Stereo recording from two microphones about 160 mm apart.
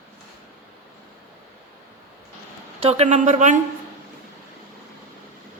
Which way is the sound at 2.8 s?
45° right (ahead or behind).